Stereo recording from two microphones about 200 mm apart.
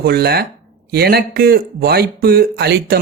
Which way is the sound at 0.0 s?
50° right (ahead or behind).